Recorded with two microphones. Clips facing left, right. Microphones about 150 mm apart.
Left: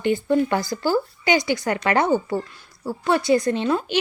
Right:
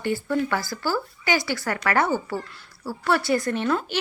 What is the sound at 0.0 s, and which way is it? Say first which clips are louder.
A woman's voice: left 5 dB; 20° left (ahead or behind).